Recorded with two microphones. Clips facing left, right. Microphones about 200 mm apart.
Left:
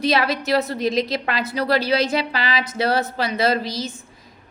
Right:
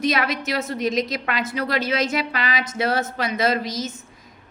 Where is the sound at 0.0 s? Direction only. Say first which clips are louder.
Left 2 dB; 30° left (ahead or behind).